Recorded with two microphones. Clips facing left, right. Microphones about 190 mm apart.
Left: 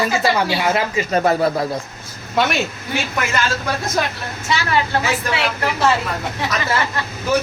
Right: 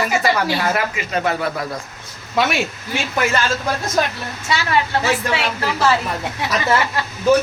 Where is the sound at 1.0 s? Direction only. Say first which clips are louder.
Left 5 dB; 40° left (ahead or behind).